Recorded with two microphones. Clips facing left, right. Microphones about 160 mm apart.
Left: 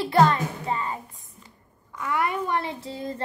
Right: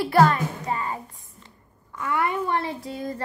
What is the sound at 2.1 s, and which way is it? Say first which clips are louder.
A child's voice: right 1 dB; 20° left (ahead or behind).